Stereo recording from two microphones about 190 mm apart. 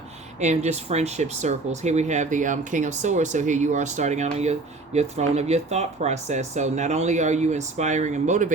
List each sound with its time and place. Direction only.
0.3 s speech: 35° right (ahead or behind)